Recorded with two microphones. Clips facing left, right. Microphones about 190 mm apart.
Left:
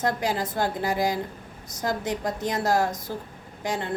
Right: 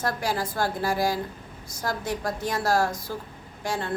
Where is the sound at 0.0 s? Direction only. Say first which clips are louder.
Left 2 dB; 20° left (ahead or behind).